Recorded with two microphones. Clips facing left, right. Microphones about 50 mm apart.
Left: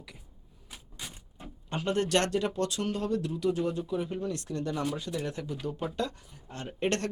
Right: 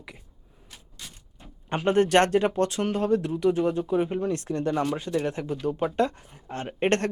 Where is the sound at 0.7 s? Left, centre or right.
Centre.